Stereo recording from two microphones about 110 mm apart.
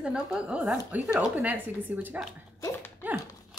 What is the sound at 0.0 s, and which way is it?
A woman's voice, 10° right (ahead or behind).